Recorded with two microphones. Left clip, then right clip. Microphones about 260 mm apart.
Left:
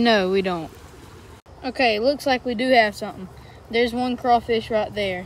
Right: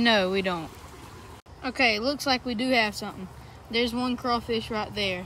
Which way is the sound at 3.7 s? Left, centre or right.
Left.